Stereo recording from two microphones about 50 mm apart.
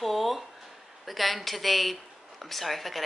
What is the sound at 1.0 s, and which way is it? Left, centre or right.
A woman's voice, centre.